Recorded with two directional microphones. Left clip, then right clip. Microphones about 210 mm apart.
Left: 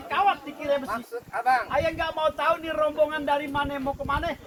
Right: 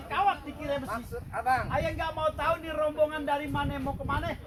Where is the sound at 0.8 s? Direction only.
30° left (ahead or behind).